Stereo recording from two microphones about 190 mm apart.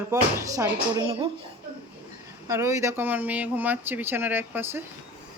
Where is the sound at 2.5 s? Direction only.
15° right (ahead or behind).